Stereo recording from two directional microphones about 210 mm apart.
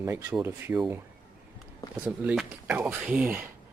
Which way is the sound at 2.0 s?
5° right (ahead or behind).